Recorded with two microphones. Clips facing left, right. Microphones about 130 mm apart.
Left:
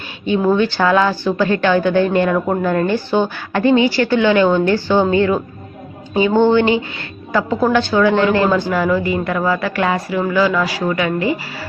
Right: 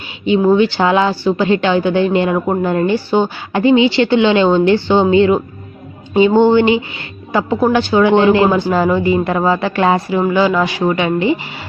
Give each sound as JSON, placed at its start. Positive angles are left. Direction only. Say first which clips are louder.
{"t": 0.3, "sound": "a woman's voice", "louder": "right 4 dB", "side_deg": -15}
{"t": 8.7, "sound": "speech", "louder": "right 3 dB", "side_deg": -25}